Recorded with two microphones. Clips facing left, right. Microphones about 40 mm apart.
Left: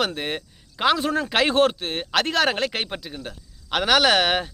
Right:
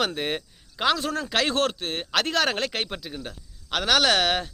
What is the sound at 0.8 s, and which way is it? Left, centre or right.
A man's voice, centre.